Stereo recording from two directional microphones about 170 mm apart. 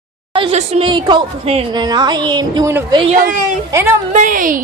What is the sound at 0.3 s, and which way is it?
A woman's voice, 35° right (ahead or behind).